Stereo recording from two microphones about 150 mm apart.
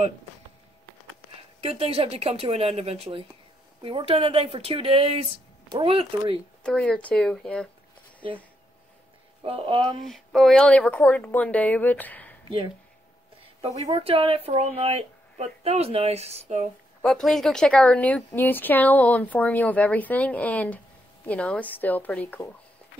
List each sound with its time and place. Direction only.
1.6 s speech: 40° right (ahead or behind)
6.6 s speech: 5° left (ahead or behind)
9.4 s speech: 40° right (ahead or behind)
9.9 s speech: centre (ahead or behind)
12.4 s a woman's voice: 35° right (ahead or behind)
14.0 s a woman's voice: 40° right (ahead or behind)
17.0 s speech: centre (ahead or behind)